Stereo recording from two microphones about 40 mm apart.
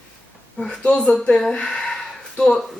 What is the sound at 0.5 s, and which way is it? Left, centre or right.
Speech, centre.